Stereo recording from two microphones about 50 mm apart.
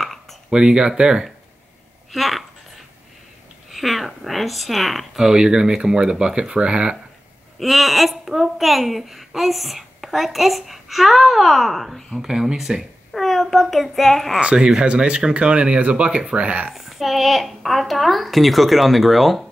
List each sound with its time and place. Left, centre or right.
0.0 s a sound: centre
0.5 s speech: centre
2.1 s a woman's voice: centre
3.7 s a woman's voice: centre
5.2 s speech: centre
7.5 s a woman's voice: centre
12.2 s a woman's voice: centre
14.4 s speech: centre
16.7 s a woman's voice: centre